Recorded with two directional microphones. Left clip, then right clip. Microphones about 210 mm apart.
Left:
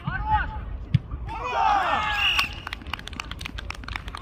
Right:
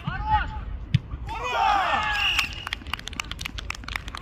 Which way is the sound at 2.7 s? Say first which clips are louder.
Right 3 dB; 40° right (ahead or behind).